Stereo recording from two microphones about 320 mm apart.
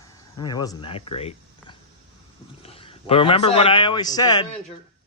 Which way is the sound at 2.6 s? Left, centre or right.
Centre.